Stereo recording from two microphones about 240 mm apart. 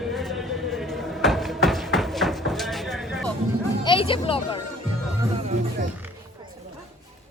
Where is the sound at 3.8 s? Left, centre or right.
Left.